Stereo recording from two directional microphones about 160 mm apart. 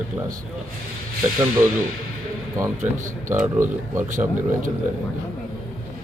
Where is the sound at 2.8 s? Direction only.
15° right (ahead or behind).